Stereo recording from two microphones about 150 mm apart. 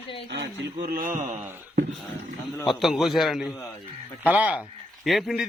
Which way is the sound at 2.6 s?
Centre (ahead or behind).